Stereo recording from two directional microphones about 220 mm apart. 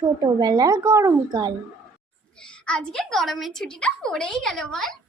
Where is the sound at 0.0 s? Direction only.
15° right (ahead or behind).